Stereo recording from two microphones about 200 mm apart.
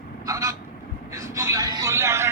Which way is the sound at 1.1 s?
15° right (ahead or behind).